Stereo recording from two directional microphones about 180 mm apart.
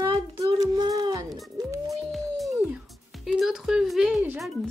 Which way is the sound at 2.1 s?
Centre (ahead or behind).